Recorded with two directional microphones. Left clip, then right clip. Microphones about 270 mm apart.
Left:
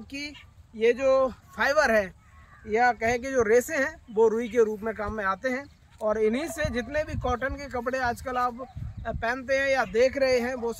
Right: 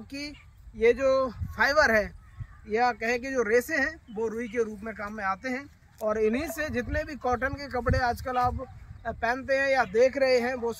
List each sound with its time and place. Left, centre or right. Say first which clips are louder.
0.7 s speech: right 1 dB; left
1.0 s speech: left 2 dB; centre